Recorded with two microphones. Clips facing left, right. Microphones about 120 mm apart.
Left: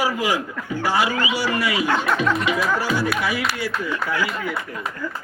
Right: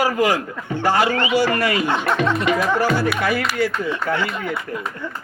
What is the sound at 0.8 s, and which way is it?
A man's voice, 50° right (ahead or behind).